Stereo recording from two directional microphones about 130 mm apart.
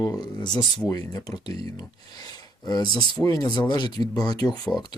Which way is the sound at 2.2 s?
30° left (ahead or behind).